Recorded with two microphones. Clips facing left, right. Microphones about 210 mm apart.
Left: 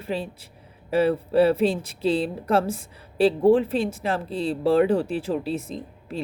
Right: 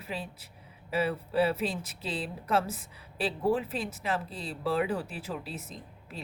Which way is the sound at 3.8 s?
35° left (ahead or behind).